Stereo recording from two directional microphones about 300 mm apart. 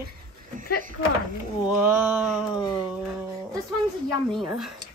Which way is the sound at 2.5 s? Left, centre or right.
Centre.